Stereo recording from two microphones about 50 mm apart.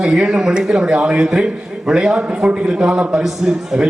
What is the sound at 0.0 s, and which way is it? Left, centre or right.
A man's voice, centre.